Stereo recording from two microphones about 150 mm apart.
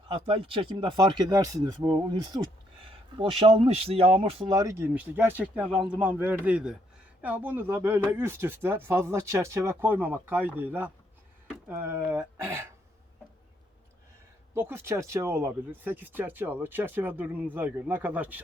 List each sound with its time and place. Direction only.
0.1 s speech: 40° right (ahead or behind)
2.9 s speech: 40° right (ahead or behind)
4.5 s speech: 20° right (ahead or behind)
14.5 s speech: 15° right (ahead or behind)